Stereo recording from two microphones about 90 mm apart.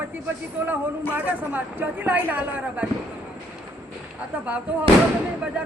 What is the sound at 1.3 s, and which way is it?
Speech, 20° right (ahead or behind).